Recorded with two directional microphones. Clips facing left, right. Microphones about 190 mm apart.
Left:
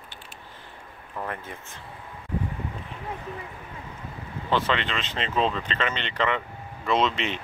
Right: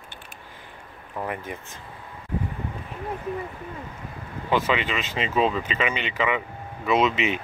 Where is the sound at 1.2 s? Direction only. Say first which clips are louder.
Right 3 dB; 15° right (ahead or behind).